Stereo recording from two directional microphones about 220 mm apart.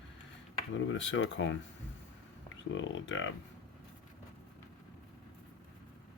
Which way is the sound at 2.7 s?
60° left (ahead or behind).